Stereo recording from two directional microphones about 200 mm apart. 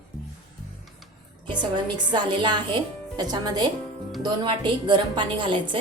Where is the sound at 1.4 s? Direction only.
20° right (ahead or behind).